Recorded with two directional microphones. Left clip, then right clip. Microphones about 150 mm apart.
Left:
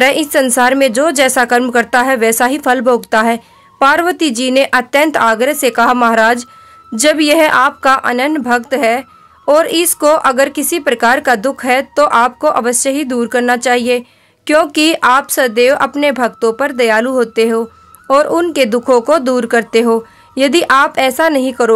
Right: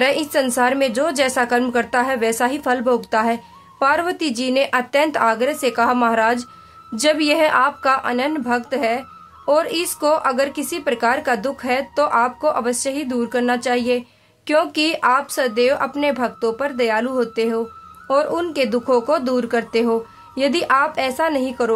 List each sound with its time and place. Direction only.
0.0 s speech: 45° left (ahead or behind)